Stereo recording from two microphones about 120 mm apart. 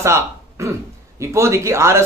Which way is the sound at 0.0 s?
25° right (ahead or behind).